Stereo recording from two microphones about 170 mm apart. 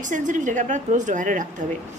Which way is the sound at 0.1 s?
50° right (ahead or behind).